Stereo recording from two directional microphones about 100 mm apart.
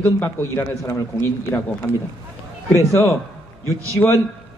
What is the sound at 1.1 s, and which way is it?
Speech, 20° left (ahead or behind).